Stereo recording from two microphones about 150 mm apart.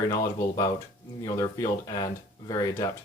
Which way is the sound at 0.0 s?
25° left (ahead or behind).